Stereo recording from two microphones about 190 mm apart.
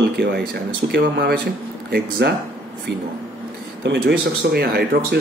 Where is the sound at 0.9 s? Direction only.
60° right (ahead or behind).